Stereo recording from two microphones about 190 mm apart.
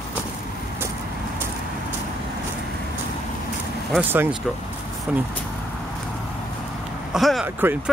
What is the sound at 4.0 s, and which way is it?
Speech, 10° right (ahead or behind).